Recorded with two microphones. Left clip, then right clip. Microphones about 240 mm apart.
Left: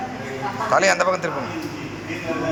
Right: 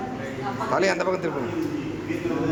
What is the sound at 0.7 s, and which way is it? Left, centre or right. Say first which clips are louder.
Speech: left 6 dB; centre.